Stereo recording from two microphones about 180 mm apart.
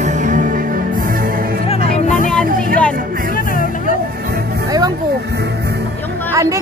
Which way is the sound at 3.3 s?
50° left (ahead or behind).